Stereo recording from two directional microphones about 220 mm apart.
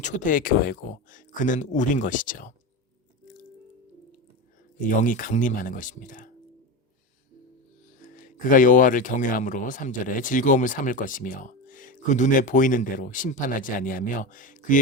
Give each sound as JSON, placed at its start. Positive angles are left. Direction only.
{"t": 0.0, "sound": "speech", "side_deg": 35}
{"t": 4.8, "sound": "speech", "side_deg": 35}
{"t": 8.0, "sound": "speech", "side_deg": 40}